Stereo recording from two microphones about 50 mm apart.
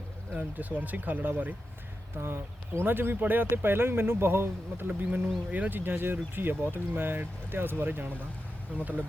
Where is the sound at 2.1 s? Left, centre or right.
Right.